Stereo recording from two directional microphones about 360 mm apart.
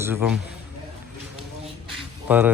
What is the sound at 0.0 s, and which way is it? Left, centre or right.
Speech, centre.